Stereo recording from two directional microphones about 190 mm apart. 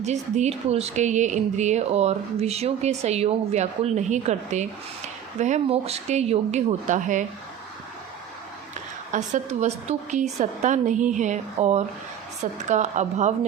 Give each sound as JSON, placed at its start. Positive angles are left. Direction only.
{"t": 0.0, "sound": "speech", "side_deg": -35}
{"t": 9.1, "sound": "speech", "side_deg": -40}